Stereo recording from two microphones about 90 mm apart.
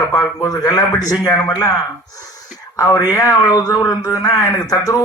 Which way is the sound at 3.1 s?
40° left (ahead or behind).